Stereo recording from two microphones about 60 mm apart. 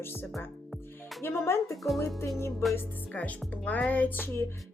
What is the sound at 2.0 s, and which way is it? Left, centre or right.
Speech, left.